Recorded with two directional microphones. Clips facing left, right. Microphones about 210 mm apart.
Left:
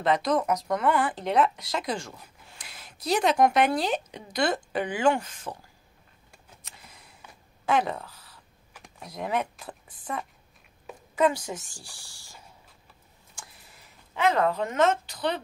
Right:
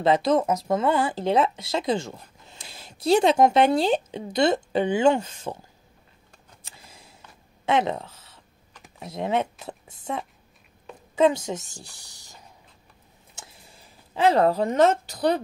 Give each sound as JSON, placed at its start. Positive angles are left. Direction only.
{"t": 0.0, "sound": "speech", "side_deg": -25}
{"t": 6.6, "sound": "a sound", "side_deg": -25}
{"t": 7.6, "sound": "speech", "side_deg": -25}
{"t": 8.7, "sound": "computer keyboard", "side_deg": 0}
{"t": 9.1, "sound": "speech", "side_deg": -25}
{"t": 13.3, "sound": "a sound", "side_deg": -25}